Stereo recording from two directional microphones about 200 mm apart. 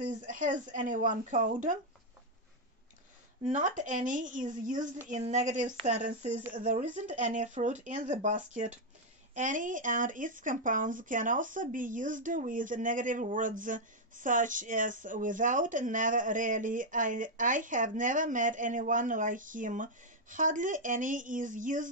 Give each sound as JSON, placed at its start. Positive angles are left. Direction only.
{"t": 0.0, "sound": "speech", "side_deg": -40}
{"t": 3.4, "sound": "speech", "side_deg": -40}